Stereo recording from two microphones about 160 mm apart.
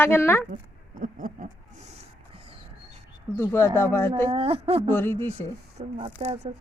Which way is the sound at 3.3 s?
15° left (ahead or behind).